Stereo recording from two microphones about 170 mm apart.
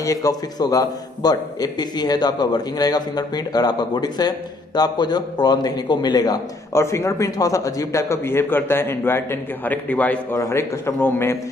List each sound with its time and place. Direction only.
0.0 s a man's voice: 20° left (ahead or behind)